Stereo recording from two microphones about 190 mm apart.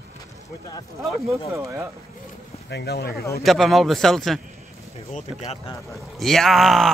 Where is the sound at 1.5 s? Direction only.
15° right (ahead or behind).